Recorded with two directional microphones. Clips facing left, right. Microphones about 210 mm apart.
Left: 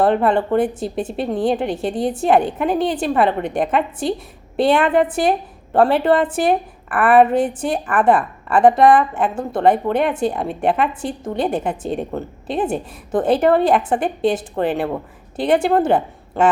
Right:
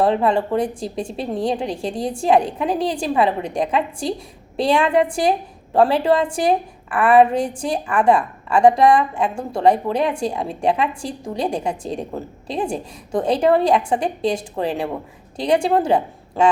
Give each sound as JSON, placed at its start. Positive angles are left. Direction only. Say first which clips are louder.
{"t": 0.0, "sound": "a woman's voice", "louder": "left 2 dB", "side_deg": 5}